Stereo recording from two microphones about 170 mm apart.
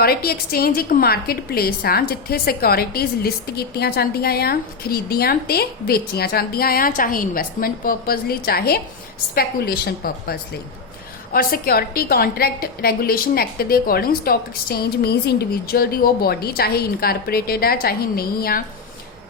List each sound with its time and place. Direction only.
0.0 s a woman's voice: 65° left (ahead or behind)